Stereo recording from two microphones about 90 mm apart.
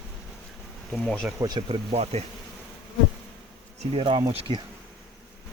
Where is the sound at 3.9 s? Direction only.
70° right (ahead or behind).